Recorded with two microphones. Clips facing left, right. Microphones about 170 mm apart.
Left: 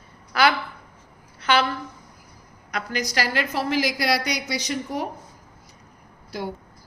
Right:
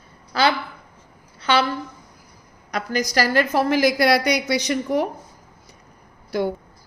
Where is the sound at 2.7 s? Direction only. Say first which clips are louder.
Right 4 dB; 40° right (ahead or behind); by 5.0 s 60° right (ahead or behind).